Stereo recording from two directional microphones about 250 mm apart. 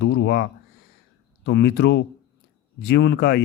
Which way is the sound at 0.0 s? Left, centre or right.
Left.